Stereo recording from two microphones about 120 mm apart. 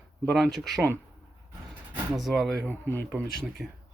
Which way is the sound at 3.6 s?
25° right (ahead or behind).